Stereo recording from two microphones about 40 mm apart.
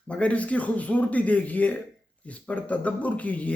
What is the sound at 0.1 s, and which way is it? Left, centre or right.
A man's voice, left.